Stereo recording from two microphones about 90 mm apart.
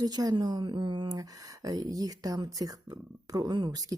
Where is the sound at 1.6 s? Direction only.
45° right (ahead or behind).